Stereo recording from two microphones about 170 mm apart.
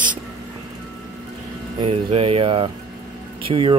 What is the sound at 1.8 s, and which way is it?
Speech, 35° right (ahead or behind).